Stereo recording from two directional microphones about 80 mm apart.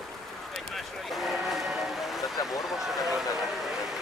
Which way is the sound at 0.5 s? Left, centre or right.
Centre.